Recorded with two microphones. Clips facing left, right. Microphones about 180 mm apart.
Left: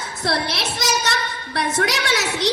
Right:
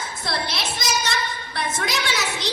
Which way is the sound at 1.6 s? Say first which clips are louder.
Left 5 dB; 75° left (ahead or behind).